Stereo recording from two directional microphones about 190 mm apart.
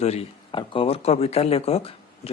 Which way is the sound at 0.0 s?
35° left (ahead or behind).